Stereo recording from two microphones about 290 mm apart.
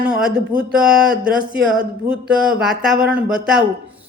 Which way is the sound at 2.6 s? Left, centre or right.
Centre.